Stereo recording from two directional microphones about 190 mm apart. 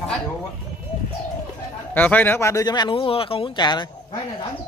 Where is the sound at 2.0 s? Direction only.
10° left (ahead or behind).